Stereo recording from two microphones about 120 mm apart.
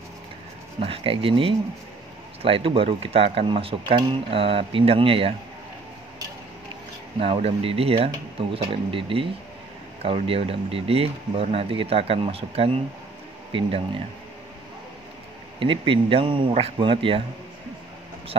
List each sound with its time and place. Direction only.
0.7 s speech: 50° right (ahead or behind)
7.2 s speech: 55° right (ahead or behind)
15.6 s speech: 45° right (ahead or behind)